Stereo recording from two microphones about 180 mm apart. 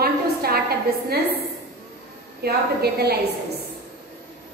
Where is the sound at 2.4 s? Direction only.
60° right (ahead or behind).